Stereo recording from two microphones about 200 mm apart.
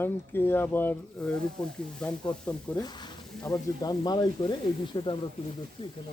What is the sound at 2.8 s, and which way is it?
Speech, 20° left (ahead or behind).